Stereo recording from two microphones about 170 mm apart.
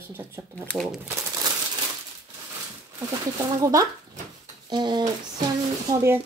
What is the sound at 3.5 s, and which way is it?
Speech, 20° right (ahead or behind).